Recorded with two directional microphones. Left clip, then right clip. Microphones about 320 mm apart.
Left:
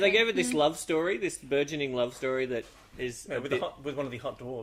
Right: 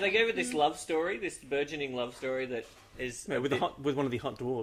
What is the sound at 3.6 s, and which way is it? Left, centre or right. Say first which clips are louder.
Speech: right 3 dB; centre.